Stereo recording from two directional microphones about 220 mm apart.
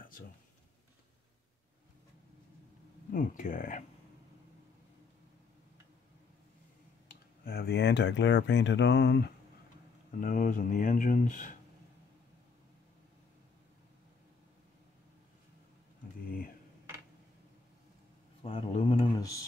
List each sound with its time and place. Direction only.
3.1 s speech: 35° left (ahead or behind)
7.1 s speech: 45° left (ahead or behind)
10.2 s speech: 40° left (ahead or behind)
18.4 s speech: 25° left (ahead or behind)